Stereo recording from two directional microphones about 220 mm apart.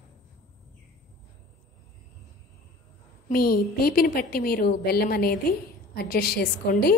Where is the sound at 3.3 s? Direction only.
45° left (ahead or behind).